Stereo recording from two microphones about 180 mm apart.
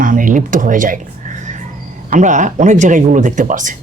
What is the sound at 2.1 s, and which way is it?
Speech, 45° right (ahead or behind).